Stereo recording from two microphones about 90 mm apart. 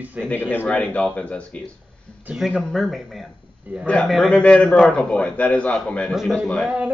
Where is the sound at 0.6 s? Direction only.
15° left (ahead or behind).